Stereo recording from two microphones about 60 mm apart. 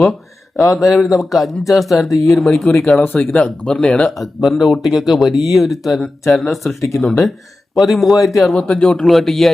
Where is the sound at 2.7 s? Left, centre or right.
Centre.